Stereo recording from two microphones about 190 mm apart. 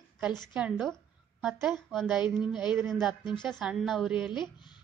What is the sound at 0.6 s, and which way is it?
A woman's voice, centre (ahead or behind).